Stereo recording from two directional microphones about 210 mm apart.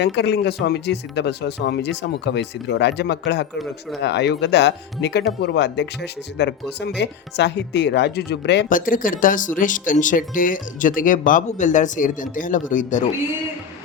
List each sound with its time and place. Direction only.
0.0 s speech: 55° left (ahead or behind); by 13.1 s 40° left (ahead or behind)